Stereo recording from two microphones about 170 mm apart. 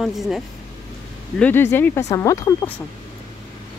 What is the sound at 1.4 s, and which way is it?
Speech, 10° left (ahead or behind).